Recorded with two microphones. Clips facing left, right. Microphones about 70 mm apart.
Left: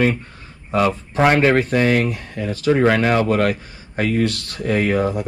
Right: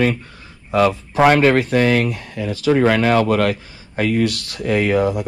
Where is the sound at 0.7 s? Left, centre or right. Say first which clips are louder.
Right 2 dB; centre.